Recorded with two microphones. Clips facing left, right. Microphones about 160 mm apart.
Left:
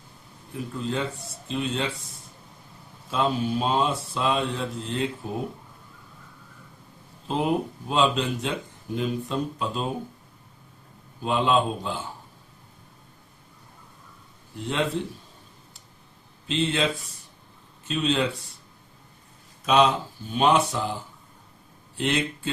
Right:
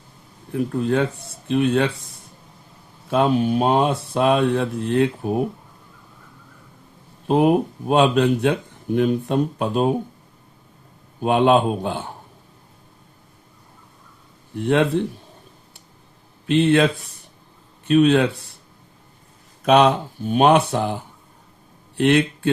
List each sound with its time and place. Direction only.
0.5 s speech: 60° right (ahead or behind)
3.1 s speech: 60° right (ahead or behind)
7.3 s speech: 60° right (ahead or behind)
11.2 s speech: 60° right (ahead or behind)
14.5 s speech: 60° right (ahead or behind)
16.5 s speech: 60° right (ahead or behind)
19.6 s speech: 60° right (ahead or behind)